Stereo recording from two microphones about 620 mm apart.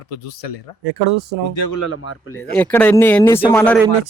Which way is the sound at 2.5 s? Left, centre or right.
Centre.